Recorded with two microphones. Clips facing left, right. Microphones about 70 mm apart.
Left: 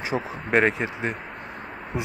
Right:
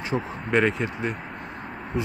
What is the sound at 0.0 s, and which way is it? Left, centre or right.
Speech, centre.